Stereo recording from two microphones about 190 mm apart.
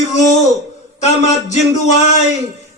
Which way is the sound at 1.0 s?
35° left (ahead or behind).